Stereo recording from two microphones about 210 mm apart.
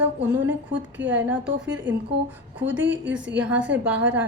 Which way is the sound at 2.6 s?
10° right (ahead or behind).